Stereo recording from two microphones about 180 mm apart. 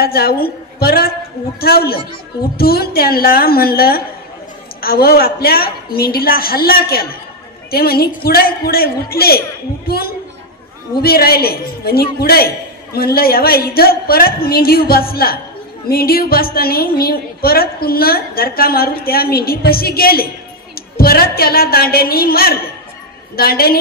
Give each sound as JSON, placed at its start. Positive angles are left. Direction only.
{"t": 0.0, "sound": "a woman's voice", "side_deg": 60}